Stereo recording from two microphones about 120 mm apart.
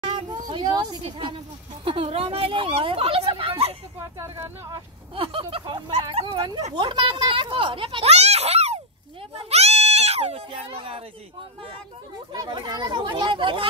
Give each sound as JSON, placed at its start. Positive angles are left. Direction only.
{"t": 0.0, "sound": "a sound", "side_deg": -40}
{"t": 1.0, "sound": "a child's voice", "side_deg": -45}
{"t": 4.0, "sound": "speech", "side_deg": -25}
{"t": 5.1, "sound": "a child's voice", "side_deg": -50}
{"t": 12.3, "sound": "speech", "side_deg": -40}